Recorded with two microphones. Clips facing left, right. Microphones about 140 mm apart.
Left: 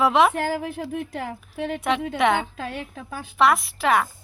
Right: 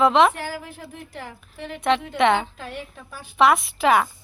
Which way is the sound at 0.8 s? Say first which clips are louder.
Left 8 dB; 75° left (ahead or behind).